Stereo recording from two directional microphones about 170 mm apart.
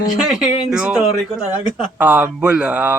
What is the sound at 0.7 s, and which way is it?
Speech, 5° right (ahead or behind).